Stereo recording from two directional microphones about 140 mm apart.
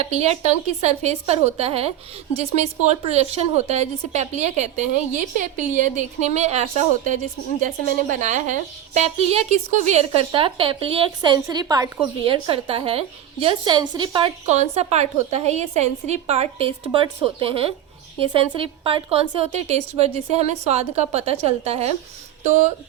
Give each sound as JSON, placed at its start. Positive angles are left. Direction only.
{"t": 0.0, "sound": "a woman's voice", "side_deg": -50}
{"t": 7.6, "sound": "a woman's voice", "side_deg": -65}
{"t": 12.2, "sound": "a woman's voice", "side_deg": -40}
{"t": 14.4, "sound": "a woman's voice", "side_deg": -50}